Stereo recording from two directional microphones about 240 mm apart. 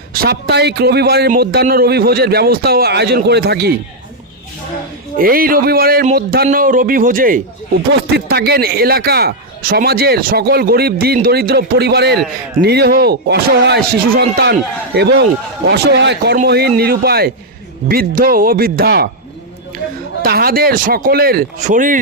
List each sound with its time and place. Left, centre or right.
0.1 s speech: right
5.1 s speech: right
20.2 s speech: right